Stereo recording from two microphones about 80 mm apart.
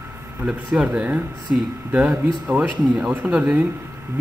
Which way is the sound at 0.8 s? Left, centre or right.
Right.